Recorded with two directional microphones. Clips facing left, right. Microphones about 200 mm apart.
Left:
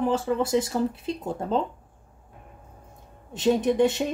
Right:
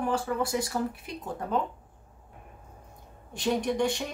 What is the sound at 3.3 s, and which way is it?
Speech, 20° left (ahead or behind).